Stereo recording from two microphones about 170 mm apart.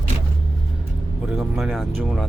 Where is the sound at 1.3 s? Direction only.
5° right (ahead or behind).